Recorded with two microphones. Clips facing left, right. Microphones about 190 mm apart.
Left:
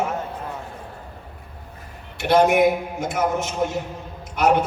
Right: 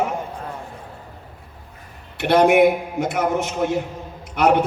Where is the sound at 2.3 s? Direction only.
60° right (ahead or behind).